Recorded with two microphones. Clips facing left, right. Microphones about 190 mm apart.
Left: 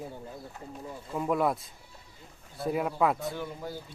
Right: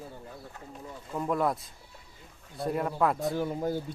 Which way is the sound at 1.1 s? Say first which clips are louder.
Left 1 dB; 5° left (ahead or behind).